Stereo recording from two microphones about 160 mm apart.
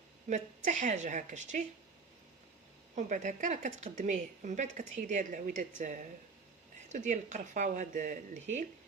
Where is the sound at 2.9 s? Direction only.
50° right (ahead or behind).